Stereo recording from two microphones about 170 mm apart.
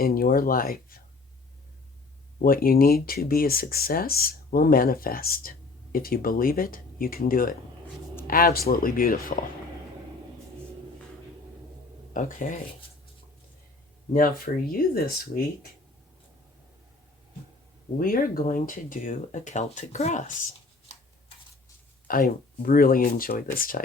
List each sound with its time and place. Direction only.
0.0 s speech: 55° left (ahead or behind)
2.4 s speech: 55° left (ahead or behind)
12.1 s speech: 50° left (ahead or behind)
14.1 s speech: 55° left (ahead or behind)
17.9 s speech: 55° left (ahead or behind)
22.0 s speech: 55° left (ahead or behind)